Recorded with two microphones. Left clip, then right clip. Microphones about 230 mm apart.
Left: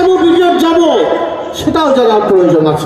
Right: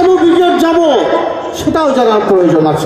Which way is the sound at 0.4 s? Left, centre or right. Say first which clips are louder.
Even; right.